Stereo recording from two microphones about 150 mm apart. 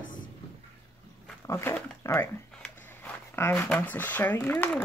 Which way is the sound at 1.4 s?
15° left (ahead or behind).